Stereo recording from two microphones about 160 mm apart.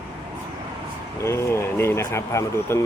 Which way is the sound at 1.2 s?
15° left (ahead or behind).